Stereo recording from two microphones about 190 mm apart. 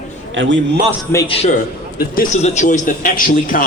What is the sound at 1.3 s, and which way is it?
Speech, 30° left (ahead or behind).